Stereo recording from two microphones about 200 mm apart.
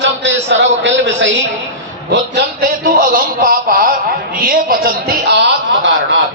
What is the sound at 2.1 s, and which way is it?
A man's voice, 50° right (ahead or behind).